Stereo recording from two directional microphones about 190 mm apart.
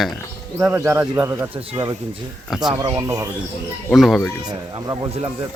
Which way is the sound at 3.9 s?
Centre (ahead or behind).